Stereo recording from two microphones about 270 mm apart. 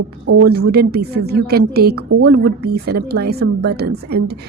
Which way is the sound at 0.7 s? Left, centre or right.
Right.